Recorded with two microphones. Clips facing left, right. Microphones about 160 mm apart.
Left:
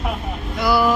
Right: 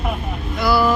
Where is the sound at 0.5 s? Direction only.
20° left (ahead or behind).